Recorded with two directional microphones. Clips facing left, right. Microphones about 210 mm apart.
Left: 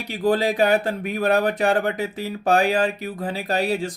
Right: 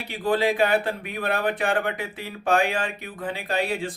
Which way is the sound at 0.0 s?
40° left (ahead or behind).